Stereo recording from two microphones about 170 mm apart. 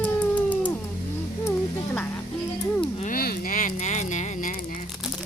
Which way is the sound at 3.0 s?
55° left (ahead or behind).